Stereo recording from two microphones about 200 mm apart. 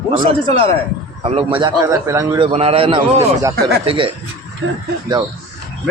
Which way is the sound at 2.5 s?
30° right (ahead or behind).